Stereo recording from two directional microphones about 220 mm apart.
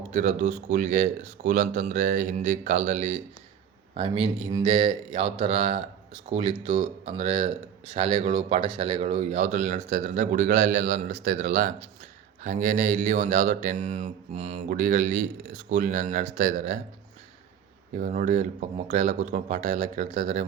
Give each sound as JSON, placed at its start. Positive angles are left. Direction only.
{"t": 0.1, "sound": "speech", "side_deg": -35}
{"t": 17.9, "sound": "speech", "side_deg": -35}